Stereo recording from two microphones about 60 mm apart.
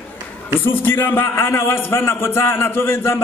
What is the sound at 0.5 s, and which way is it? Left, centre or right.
A man's voice, left.